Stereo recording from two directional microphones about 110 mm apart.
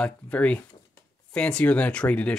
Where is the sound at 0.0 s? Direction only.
10° left (ahead or behind).